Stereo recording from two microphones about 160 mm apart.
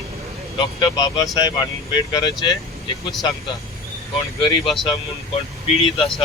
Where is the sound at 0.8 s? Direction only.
25° left (ahead or behind).